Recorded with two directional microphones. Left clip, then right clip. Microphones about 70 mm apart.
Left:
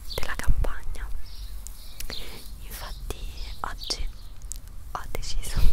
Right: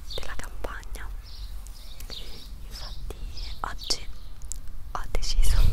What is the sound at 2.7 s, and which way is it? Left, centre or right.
Whispering, left.